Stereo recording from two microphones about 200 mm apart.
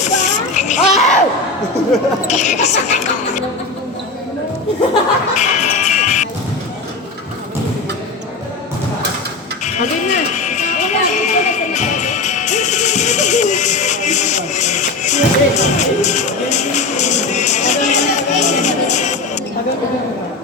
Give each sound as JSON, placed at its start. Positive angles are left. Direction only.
{"t": 0.0, "sound": "a sound", "side_deg": 35}
{"t": 2.2, "sound": "speech", "side_deg": 35}
{"t": 5.4, "sound": "music", "side_deg": 35}
{"t": 9.6, "sound": "music", "side_deg": 35}